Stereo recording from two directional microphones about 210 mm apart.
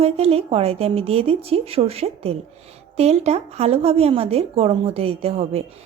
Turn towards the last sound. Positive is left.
turn(degrees=-30)  # may be behind; listen again after turning